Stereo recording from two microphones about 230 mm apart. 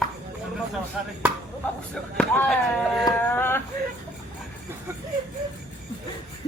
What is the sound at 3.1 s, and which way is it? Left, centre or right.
Music, centre.